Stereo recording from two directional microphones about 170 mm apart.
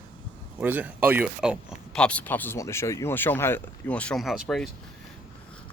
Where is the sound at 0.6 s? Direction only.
10° right (ahead or behind).